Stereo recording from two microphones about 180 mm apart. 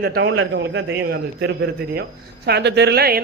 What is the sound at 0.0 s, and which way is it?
A man's voice, 70° right (ahead or behind).